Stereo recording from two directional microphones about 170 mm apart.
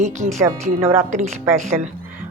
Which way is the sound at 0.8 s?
15° right (ahead or behind).